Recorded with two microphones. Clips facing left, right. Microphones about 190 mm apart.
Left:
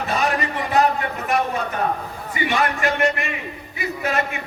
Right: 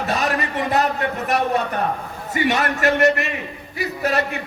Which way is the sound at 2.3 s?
40° right (ahead or behind).